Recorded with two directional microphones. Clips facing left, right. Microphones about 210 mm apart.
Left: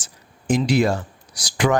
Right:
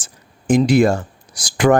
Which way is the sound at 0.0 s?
50° right (ahead or behind).